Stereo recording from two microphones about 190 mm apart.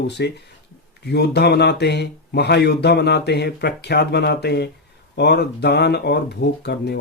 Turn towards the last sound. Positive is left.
turn(degrees=60)  # may be behind; listen again after turning